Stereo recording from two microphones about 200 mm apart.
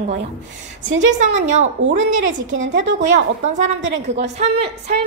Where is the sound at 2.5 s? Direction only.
70° right (ahead or behind).